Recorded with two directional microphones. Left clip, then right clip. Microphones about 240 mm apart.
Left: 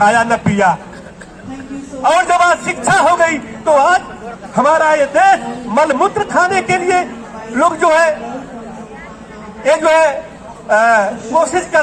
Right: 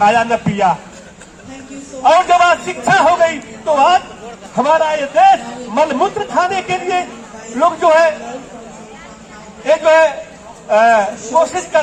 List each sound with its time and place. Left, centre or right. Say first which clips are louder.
0.0 s a man's voice: left 1 dB; left
2.0 s a man's voice: right 1 dB; left
9.6 s a man's voice: even; left